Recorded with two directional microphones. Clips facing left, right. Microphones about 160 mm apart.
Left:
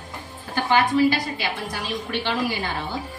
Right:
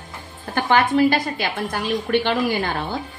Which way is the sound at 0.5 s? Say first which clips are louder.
Right 2 dB; 55° right (ahead or behind).